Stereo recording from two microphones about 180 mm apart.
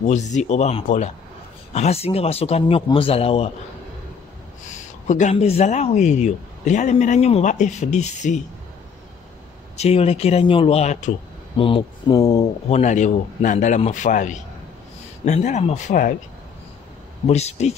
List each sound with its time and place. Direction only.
0.0 s speech: 40° left (ahead or behind)
4.6 s speech: 40° left (ahead or behind)
9.8 s speech: 35° left (ahead or behind)
12.2 s speech: 20° left (ahead or behind)
12.6 s speech: 35° left (ahead or behind)
17.3 s speech: 35° left (ahead or behind)